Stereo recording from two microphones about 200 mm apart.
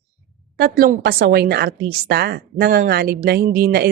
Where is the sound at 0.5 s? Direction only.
50° right (ahead or behind).